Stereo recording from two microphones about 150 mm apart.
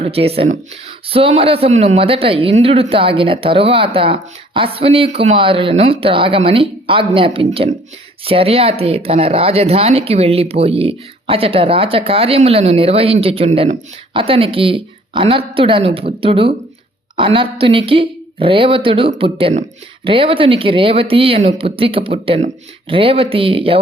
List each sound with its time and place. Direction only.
0.0 s a woman's voice: 40° right (ahead or behind)